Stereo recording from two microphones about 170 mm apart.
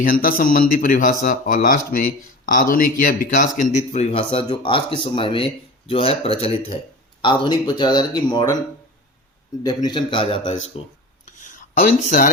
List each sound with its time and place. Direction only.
0.0 s a man's voice: 55° left (ahead or behind); by 8.5 s 25° left (ahead or behind)
9.6 s speech: 25° left (ahead or behind)
11.3 s a sound: 45° left (ahead or behind)